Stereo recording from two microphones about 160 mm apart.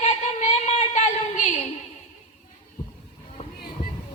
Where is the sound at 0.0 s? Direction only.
45° left (ahead or behind).